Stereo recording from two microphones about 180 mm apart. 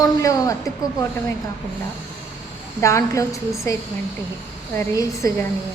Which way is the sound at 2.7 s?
15° left (ahead or behind).